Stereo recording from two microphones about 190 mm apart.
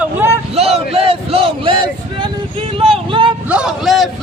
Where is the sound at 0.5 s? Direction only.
35° right (ahead or behind).